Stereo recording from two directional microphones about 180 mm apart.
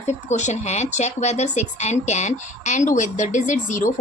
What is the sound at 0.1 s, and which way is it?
Speech, 40° left (ahead or behind).